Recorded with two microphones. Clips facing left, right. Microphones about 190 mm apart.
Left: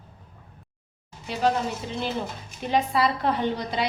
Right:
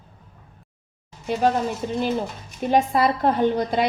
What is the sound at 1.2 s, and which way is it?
A woman's voice, 45° right (ahead or behind).